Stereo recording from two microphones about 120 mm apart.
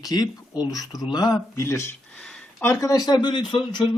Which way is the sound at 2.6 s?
30° left (ahead or behind).